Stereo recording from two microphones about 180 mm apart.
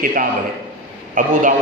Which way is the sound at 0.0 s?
50° right (ahead or behind).